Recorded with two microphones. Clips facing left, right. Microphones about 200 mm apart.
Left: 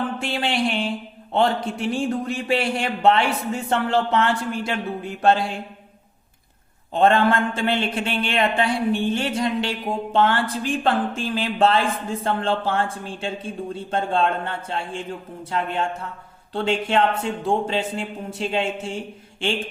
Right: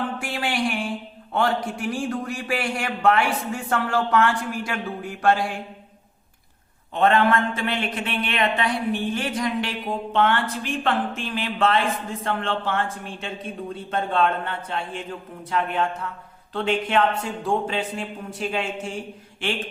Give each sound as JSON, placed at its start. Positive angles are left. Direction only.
{"t": 0.2, "sound": "speech", "side_deg": 25}
{"t": 6.9, "sound": "speech", "side_deg": 30}